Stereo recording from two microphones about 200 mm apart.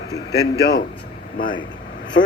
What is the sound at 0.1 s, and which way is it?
Speech, 55° left (ahead or behind).